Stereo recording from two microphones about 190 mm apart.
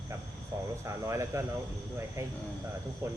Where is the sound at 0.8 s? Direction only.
15° right (ahead or behind).